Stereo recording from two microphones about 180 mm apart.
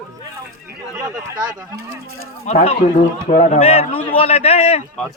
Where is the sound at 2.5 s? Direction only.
40° left (ahead or behind).